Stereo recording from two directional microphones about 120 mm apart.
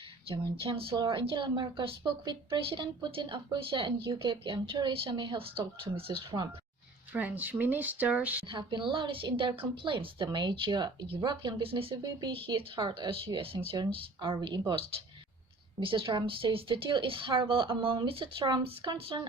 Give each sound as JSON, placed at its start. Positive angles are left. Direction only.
{"t": 0.3, "sound": "a woman's voice", "side_deg": -50}
{"t": 1.5, "sound": "a woman's voice", "side_deg": -35}
{"t": 7.1, "sound": "speech", "side_deg": -15}
{"t": 8.4, "sound": "a woman's voice", "side_deg": -40}
{"t": 15.8, "sound": "a woman's voice", "side_deg": -45}